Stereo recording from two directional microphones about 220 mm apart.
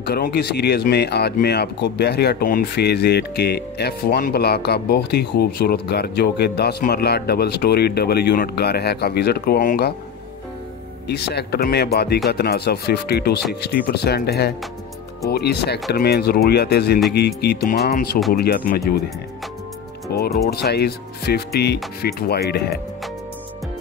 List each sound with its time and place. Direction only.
0.0 s speech: 45° left (ahead or behind)
11.1 s speech: 50° left (ahead or behind)
20.1 s speech: 45° left (ahead or behind)